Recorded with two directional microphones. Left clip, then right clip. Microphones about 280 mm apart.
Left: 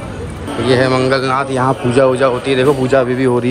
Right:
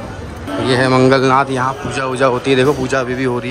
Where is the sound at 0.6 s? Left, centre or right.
Centre.